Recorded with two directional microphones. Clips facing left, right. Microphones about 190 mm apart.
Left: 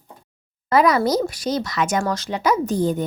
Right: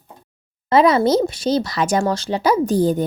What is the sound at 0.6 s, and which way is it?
Speech, 25° right (ahead or behind).